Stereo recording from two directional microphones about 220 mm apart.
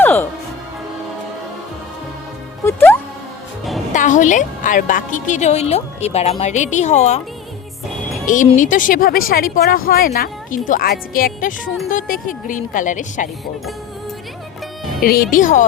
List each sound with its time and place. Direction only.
0.0 s music: 10° left (ahead or behind)
2.6 s music: 10° left (ahead or behind)
3.9 s a woman's voice: 35° left (ahead or behind)
8.3 s speech: 35° left (ahead or behind)
15.0 s speech: 40° left (ahead or behind)